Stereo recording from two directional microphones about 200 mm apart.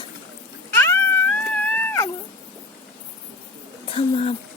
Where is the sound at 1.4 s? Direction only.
5° left (ahead or behind).